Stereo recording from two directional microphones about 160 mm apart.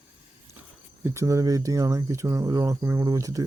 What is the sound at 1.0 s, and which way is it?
Speech, 20° right (ahead or behind).